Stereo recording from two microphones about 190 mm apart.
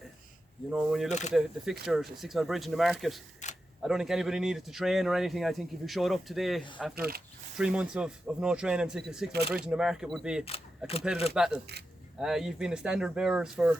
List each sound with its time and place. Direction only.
0.7 s a man's voice: 5° right (ahead or behind)
3.4 s camera: 40° left (ahead or behind)
3.8 s a man's voice: centre (ahead or behind)
6.9 s speech: 55° right (ahead or behind)
7.6 s a man's voice: 5° right (ahead or behind)